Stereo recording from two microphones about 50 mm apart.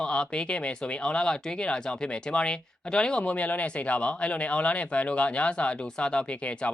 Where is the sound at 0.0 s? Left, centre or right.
Centre.